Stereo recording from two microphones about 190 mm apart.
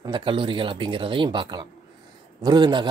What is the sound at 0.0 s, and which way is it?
A man's voice, 25° right (ahead or behind).